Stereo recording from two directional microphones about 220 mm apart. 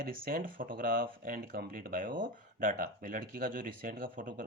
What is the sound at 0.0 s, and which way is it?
Speech, 40° right (ahead or behind).